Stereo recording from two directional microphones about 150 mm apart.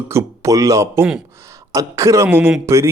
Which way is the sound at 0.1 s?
20° right (ahead or behind).